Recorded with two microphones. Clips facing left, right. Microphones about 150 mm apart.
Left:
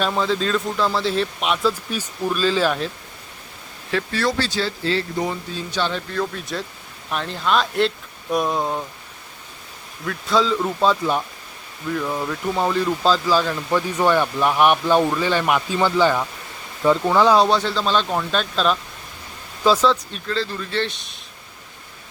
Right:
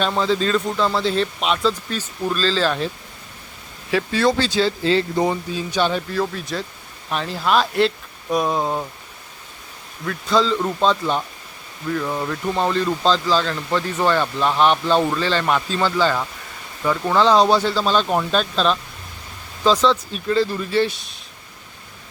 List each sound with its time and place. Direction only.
0.0 s speech: centre (ahead or behind)
3.9 s speech: 20° right (ahead or behind)
6.3 s speech: centre (ahead or behind)
10.1 s speech: centre (ahead or behind)
20.1 s speech: 15° right (ahead or behind)